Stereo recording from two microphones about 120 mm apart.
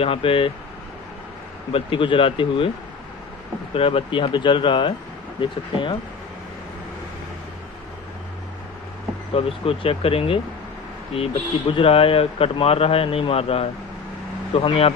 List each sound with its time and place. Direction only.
0.0 s a man's voice: 50° left (ahead or behind)
1.7 s a man's voice: 45° left (ahead or behind)
3.7 s a man's voice: 50° left (ahead or behind)
9.3 s a man's voice: 50° left (ahead or behind)
11.7 s a man's voice: 50° left (ahead or behind)